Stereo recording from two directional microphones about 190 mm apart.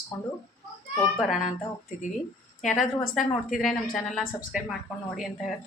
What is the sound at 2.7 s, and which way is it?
Speech, 40° left (ahead or behind).